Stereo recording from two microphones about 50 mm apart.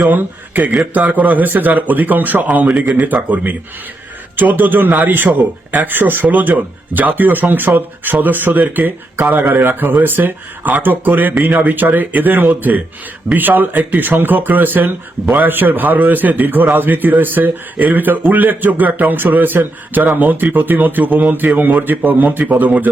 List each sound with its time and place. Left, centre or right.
0.1 s a man's voice: right